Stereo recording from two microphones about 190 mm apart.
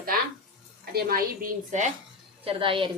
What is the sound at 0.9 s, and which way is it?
Speech, 55° right (ahead or behind).